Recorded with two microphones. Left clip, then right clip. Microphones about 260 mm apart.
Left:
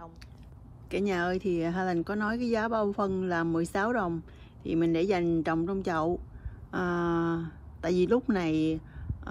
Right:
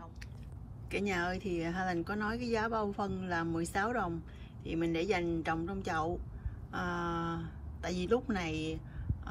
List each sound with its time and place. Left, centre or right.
0.8 s a woman's voice: centre